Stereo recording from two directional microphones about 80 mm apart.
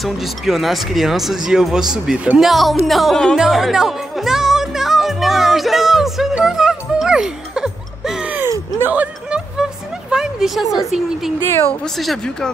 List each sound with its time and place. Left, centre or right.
0.0 s speech: centre
3.3 s music: centre
8.8 s music: centre
9.6 s a sound: centre
12.0 s speech: centre